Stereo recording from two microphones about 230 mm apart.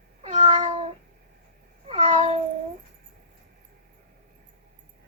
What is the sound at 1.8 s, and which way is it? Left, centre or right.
Cat, right.